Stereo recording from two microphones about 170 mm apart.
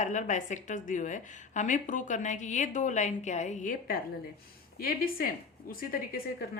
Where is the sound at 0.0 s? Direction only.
45° left (ahead or behind).